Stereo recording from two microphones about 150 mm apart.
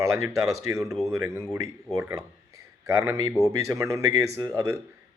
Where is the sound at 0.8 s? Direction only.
Centre (ahead or behind).